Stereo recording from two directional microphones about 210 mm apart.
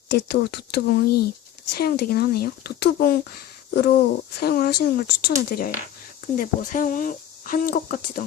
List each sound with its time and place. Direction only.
0.1 s speech: 50° left (ahead or behind)